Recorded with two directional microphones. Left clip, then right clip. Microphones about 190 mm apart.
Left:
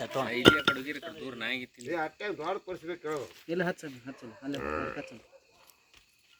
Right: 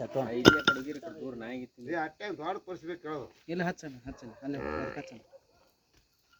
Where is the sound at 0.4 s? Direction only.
15° right (ahead or behind).